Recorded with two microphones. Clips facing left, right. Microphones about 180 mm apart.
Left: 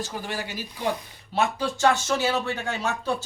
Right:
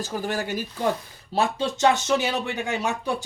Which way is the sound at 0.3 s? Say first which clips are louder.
Right 5 dB; 50° right (ahead or behind).